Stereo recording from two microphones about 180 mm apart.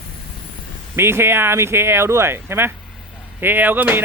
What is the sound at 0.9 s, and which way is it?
Speech, 15° right (ahead or behind).